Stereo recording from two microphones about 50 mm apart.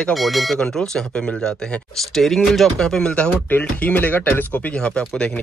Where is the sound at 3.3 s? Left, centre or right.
Left.